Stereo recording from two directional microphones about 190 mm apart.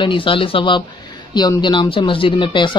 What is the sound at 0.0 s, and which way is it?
Speech, 25° left (ahead or behind).